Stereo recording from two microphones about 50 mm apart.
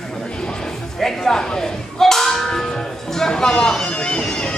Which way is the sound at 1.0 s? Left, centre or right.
Centre.